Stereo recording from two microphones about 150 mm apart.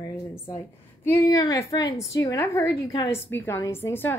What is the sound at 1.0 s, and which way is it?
A woman's voice, 25° left (ahead or behind).